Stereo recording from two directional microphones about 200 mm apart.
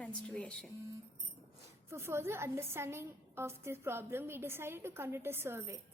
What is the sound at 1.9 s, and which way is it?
A woman's voice, 10° right (ahead or behind).